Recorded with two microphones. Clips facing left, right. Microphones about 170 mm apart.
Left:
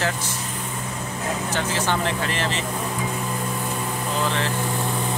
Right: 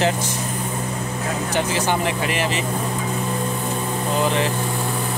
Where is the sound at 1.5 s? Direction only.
15° right (ahead or behind).